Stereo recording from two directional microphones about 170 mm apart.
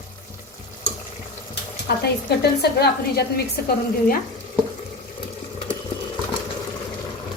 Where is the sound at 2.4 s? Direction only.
70° left (ahead or behind).